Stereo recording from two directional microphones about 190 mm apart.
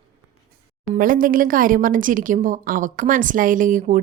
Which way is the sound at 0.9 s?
45° right (ahead or behind).